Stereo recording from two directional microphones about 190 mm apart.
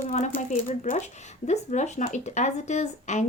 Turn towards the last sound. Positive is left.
turn(degrees=40)  # may be behind; listen again after turning